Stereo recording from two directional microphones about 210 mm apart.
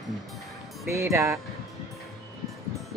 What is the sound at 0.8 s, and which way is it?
Speech, 10° right (ahead or behind).